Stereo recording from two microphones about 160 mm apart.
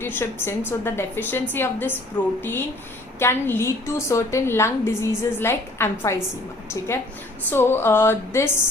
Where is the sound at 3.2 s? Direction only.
15° left (ahead or behind).